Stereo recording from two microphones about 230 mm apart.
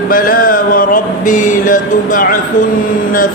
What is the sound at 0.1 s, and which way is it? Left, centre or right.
Music, left.